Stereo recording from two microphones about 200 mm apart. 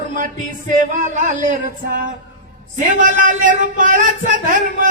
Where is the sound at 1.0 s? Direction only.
40° right (ahead or behind).